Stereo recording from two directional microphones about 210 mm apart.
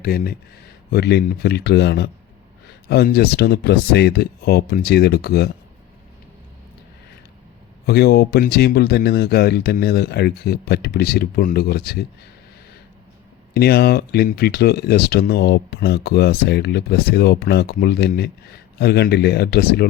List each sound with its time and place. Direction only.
0.0 s speech: 45° left (ahead or behind)
7.9 s speech: 50° left (ahead or behind)
13.5 s speech: 50° left (ahead or behind)